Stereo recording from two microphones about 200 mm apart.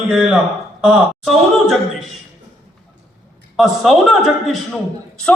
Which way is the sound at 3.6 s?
Centre (ahead or behind).